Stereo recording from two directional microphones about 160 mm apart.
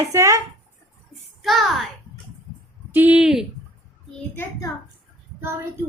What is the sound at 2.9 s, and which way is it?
Speech, 10° right (ahead or behind).